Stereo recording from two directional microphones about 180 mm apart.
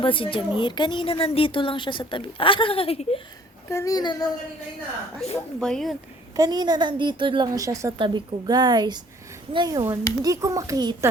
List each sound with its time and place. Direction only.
0.0 s a woman's voice: 30° left (ahead or behind)
3.7 s a woman's voice: 15° left (ahead or behind)
5.5 s speech: 5° left (ahead or behind)
6.3 s a woman's voice: 20° right (ahead or behind)